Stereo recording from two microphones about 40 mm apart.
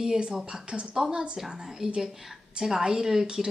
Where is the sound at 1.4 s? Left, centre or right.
Centre.